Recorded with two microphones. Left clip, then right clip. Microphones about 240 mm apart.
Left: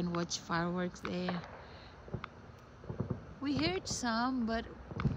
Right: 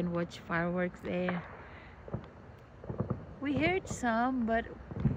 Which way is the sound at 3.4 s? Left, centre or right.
Centre.